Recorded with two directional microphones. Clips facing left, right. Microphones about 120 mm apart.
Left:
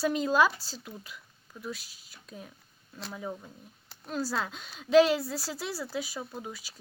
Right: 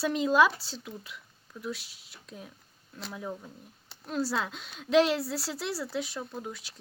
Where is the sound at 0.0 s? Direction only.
Centre (ahead or behind).